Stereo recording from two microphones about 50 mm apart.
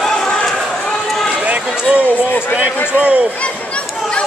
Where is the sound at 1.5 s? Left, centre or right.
Right.